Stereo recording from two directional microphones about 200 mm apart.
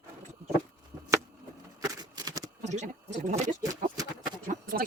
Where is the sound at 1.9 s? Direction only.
20° right (ahead or behind).